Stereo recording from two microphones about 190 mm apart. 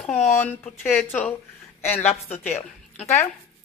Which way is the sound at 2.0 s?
35° left (ahead or behind).